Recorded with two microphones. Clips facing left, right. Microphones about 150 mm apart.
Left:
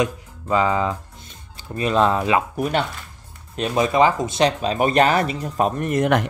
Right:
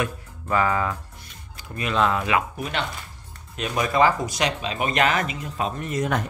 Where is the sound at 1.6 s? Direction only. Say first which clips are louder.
Left 4 dB; 30° left (ahead or behind).